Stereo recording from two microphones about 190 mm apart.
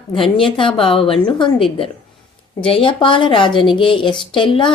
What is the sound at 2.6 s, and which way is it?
A woman's voice, 30° left (ahead or behind).